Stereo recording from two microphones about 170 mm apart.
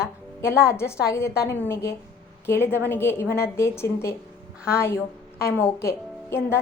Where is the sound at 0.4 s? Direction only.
15° left (ahead or behind).